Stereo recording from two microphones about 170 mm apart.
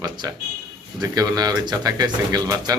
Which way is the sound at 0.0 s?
25° right (ahead or behind).